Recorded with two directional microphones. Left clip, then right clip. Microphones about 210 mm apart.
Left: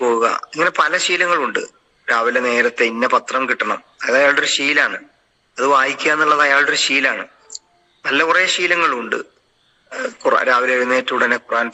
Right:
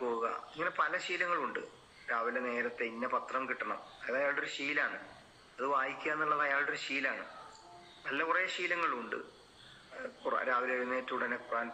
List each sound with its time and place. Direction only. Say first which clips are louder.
0.0 s a man's voice: left 19 dB; 50° left (ahead or behind)